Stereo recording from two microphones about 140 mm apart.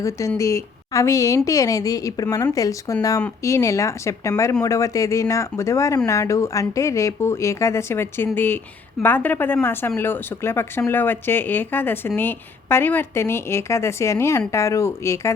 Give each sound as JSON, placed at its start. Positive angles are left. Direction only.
{"t": 0.0, "sound": "speech", "side_deg": 20}